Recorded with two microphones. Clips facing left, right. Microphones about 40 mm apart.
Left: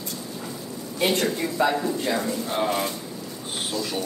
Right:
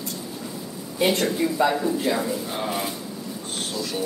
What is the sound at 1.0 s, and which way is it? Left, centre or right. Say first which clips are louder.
Speech: right 2 dB; centre.